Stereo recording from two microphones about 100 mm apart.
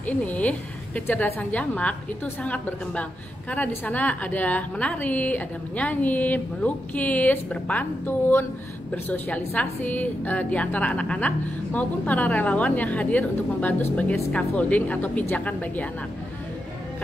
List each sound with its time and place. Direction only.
0.0 s a woman's voice: 15° left (ahead or behind)